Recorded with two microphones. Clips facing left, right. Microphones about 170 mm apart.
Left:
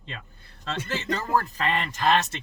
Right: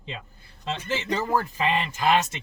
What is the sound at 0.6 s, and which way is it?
Speech, 15° right (ahead or behind).